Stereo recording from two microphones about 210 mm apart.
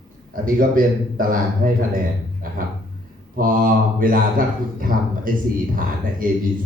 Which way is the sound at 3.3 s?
40° right (ahead or behind).